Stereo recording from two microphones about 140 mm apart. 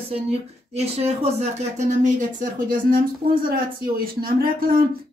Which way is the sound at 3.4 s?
90° right.